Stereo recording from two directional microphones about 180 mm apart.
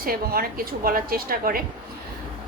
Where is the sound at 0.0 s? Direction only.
55° right (ahead or behind).